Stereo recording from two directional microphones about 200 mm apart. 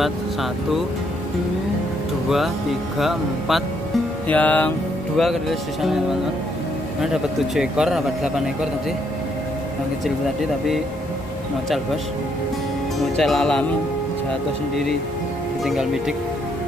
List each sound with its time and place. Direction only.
2.2 s speech: centre (ahead or behind)
7.0 s speech: 5° right (ahead or behind)
13.1 s speech: centre (ahead or behind)
15.6 s speech: centre (ahead or behind)